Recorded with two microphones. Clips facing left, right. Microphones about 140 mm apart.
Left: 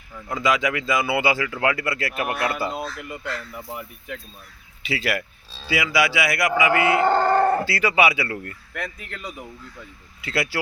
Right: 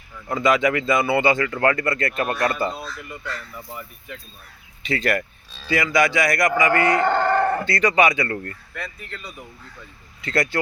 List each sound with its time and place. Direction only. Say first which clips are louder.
0.3 s speech: right 3 dB; centre (ahead or behind)
2.8 s speech: left 3 dB; 60° left (ahead or behind)
4.8 s speech: right 3 dB; 5° left (ahead or behind)
7.1 s a sound: left 1 dB; 35° left (ahead or behind)
7.6 s speech: right 2 dB; 5° left (ahead or behind)
8.7 s speech: left 6 dB; 75° left (ahead or behind)
10.2 s speech: right 3 dB; 5° left (ahead or behind)